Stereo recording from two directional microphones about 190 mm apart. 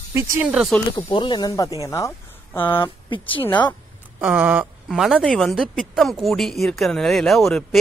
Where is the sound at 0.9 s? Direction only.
25° left (ahead or behind).